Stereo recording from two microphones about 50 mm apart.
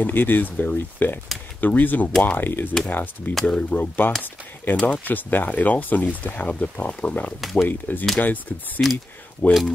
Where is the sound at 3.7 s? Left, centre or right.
Left.